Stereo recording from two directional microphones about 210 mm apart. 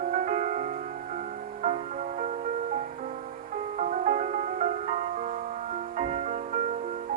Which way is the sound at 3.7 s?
35° right (ahead or behind).